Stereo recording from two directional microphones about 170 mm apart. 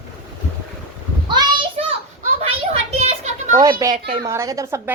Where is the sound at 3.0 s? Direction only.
40° right (ahead or behind).